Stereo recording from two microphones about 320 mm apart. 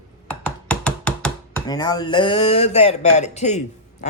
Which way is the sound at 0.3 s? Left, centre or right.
Centre.